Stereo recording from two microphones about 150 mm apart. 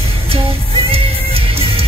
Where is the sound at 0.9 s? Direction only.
40° right (ahead or behind).